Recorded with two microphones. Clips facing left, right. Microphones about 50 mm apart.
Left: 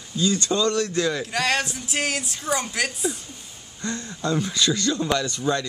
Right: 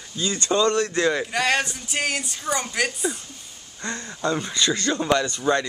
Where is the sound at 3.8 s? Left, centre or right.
Right.